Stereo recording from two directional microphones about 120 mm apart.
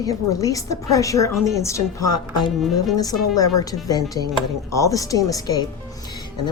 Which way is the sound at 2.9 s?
30° left (ahead or behind).